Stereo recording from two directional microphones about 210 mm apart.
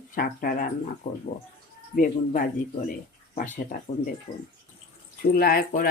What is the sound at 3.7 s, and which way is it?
Speech, 35° left (ahead or behind).